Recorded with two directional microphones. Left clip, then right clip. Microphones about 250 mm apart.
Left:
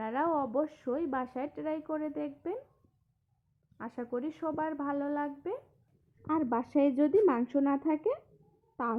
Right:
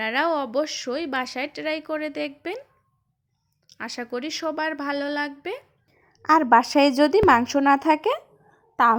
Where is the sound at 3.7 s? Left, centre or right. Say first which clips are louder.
Right 7 dB; right.